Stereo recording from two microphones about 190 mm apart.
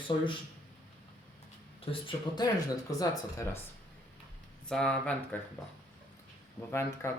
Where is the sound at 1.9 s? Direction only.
25° left (ahead or behind).